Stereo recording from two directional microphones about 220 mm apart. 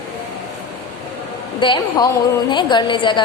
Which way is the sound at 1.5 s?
20° left (ahead or behind).